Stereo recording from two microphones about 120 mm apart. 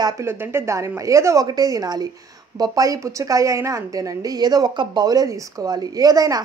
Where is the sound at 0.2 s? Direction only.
20° right (ahead or behind).